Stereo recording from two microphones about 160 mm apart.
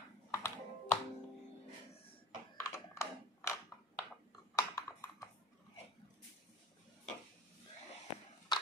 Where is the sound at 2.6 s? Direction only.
15° left (ahead or behind).